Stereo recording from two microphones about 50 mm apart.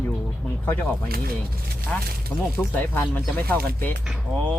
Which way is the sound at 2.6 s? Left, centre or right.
Left.